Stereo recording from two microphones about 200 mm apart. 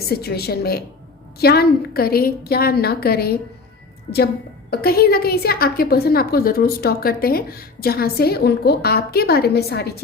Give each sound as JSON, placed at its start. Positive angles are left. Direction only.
{"t": 0.0, "sound": "a woman's voice", "side_deg": 50}
{"t": 4.7, "sound": "a woman's voice", "side_deg": 50}